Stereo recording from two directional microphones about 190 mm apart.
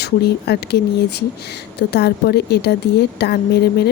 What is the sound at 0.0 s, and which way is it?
A woman's voice, 60° left (ahead or behind).